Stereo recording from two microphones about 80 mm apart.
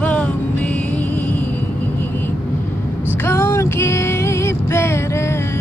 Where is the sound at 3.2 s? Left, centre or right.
Left.